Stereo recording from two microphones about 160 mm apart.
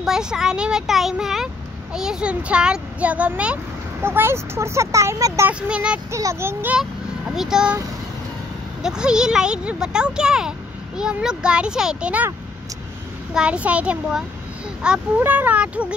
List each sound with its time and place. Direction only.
0.0 s a child's voice: 5° right (ahead or behind)
5.5 s a child's voice: 5° right (ahead or behind)
6.1 s a child's voice: 15° right (ahead or behind)
8.8 s speech: 5° right (ahead or behind)
13.3 s a child's voice: 5° right (ahead or behind)